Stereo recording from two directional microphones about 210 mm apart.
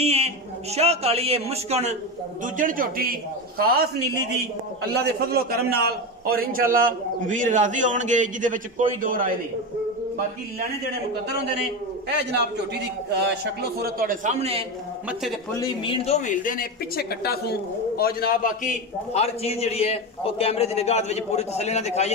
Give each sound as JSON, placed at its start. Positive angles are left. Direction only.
{"t": 0.0, "sound": "a sound", "side_deg": -30}
{"t": 0.7, "sound": "a man's voice", "side_deg": -30}
{"t": 4.8, "sound": "a man's voice", "side_deg": -50}
{"t": 13.1, "sound": "a man's voice", "side_deg": -50}
{"t": 15.6, "sound": "a woman's voice", "side_deg": 25}